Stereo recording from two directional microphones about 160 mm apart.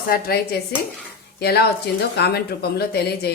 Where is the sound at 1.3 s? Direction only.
85° left.